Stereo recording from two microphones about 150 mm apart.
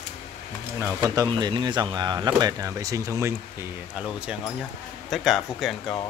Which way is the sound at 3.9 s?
5° right (ahead or behind).